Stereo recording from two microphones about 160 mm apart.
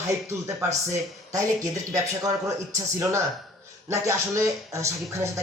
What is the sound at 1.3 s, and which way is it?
Speech, 20° right (ahead or behind).